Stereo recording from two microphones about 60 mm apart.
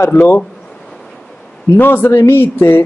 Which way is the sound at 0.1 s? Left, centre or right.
Left.